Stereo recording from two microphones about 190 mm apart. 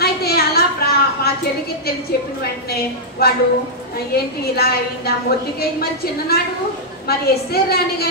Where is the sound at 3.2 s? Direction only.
55° left (ahead or behind).